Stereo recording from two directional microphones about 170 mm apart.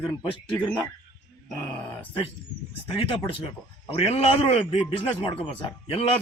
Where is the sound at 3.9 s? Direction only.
35° left (ahead or behind).